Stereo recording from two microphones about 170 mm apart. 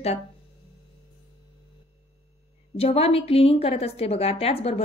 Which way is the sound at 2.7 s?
35° left (ahead or behind).